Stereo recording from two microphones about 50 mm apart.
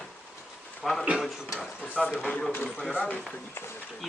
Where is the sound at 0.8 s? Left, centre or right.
Centre.